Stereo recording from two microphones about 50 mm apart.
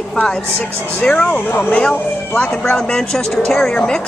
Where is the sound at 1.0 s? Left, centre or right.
Left.